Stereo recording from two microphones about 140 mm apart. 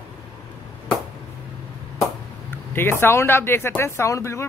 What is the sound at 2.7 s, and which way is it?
Speech, 15° left (ahead or behind).